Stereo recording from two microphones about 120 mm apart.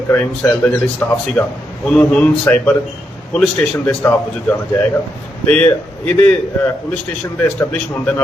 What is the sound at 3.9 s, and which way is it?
A man's voice, 10° left (ahead or behind).